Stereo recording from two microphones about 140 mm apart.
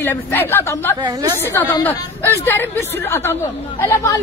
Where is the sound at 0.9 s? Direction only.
30° right (ahead or behind).